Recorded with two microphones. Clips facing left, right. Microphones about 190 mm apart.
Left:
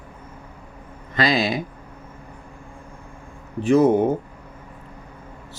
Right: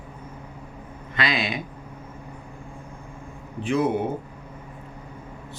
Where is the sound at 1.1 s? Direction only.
35° left (ahead or behind).